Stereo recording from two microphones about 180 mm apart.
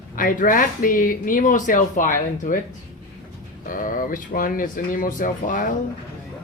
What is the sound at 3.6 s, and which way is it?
Speech, 50° left (ahead or behind).